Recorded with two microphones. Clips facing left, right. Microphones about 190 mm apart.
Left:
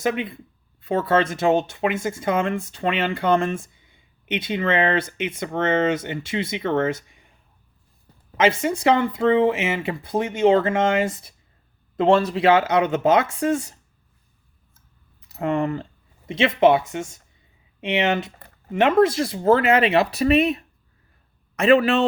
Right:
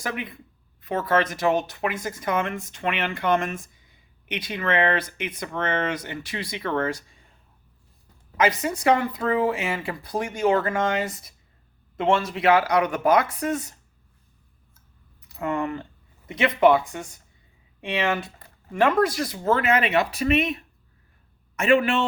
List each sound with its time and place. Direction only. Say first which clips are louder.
0.0 s speech: left 7 dB; 25° left (ahead or behind)
8.4 s speech: left 3 dB; 25° left (ahead or behind)
15.4 s speech: left 4 dB; 30° left (ahead or behind)
21.6 s speech: left 4 dB; 35° left (ahead or behind)